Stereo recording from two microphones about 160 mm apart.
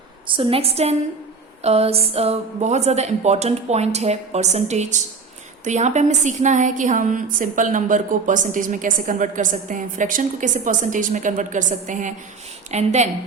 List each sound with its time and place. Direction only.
0.3 s a woman's voice: 35° right (ahead or behind)